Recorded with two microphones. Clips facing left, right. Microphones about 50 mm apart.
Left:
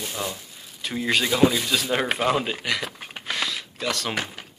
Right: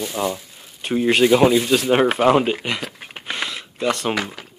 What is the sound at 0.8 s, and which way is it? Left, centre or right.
Speech, right.